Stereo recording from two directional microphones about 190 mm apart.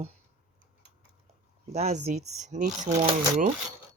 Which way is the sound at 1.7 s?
35° right (ahead or behind).